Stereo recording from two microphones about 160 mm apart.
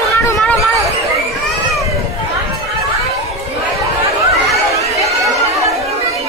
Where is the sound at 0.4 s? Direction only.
5° left (ahead or behind).